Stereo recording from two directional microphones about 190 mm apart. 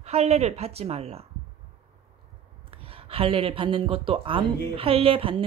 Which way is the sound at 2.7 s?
30° right (ahead or behind).